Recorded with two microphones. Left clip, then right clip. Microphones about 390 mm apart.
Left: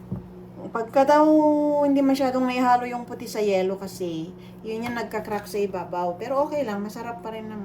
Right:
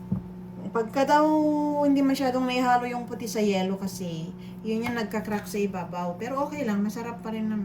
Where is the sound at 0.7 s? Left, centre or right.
Centre.